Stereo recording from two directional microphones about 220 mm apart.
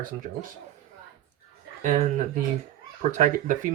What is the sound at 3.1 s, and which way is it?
Speech, 35° right (ahead or behind).